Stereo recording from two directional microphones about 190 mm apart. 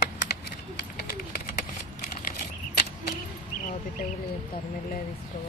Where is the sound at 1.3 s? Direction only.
45° left (ahead or behind).